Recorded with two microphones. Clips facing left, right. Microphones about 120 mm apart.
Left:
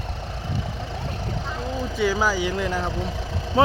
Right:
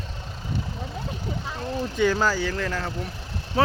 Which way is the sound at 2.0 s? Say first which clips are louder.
Even; 5° left (ahead or behind).